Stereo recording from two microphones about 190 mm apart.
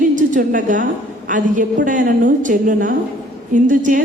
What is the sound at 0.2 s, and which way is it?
A woman's voice, 45° right (ahead or behind).